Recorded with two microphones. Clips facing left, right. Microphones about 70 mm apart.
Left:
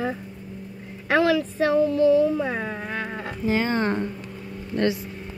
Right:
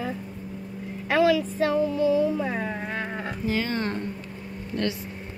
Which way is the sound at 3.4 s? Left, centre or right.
Left.